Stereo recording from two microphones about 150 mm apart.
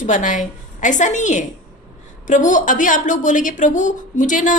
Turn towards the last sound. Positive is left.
turn(degrees=60)  # may be behind; listen again after turning